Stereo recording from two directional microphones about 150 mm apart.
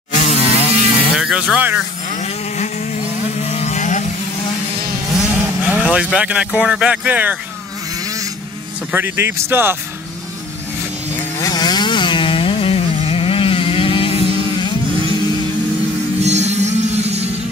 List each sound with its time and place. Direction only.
0.1 s electric toothbrush: 50° left (ahead or behind)
1.1 s speech: 5° right (ahead or behind)
2.1 s vehicle: 50° left (ahead or behind)
5.1 s speech: 10° right (ahead or behind)
8.0 s vehicle: 20° right (ahead or behind)
8.9 s speech: 15° right (ahead or behind)
11.1 s chainsaw: 20° left (ahead or behind)
16.2 s music: 45° right (ahead or behind)